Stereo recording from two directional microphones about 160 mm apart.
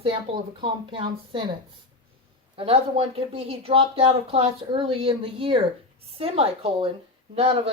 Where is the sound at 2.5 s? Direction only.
35° right (ahead or behind).